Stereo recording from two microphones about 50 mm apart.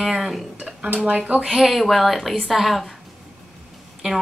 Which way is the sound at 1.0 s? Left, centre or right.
Right.